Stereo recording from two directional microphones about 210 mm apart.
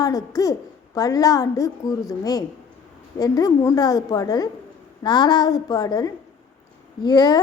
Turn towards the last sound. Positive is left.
turn(degrees=20)  # may be behind; listen again after turning